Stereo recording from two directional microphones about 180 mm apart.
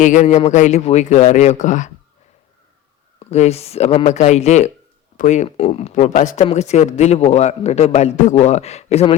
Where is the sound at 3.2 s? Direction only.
35° left (ahead or behind).